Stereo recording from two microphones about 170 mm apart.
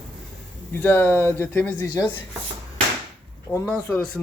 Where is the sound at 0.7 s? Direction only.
10° left (ahead or behind).